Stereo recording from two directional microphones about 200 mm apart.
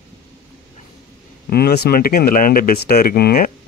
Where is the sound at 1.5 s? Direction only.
50° left (ahead or behind).